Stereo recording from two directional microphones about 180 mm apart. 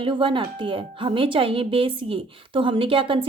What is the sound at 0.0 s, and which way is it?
Speech, 30° right (ahead or behind).